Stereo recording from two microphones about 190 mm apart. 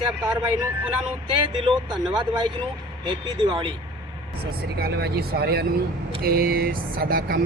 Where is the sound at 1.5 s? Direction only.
25° right (ahead or behind).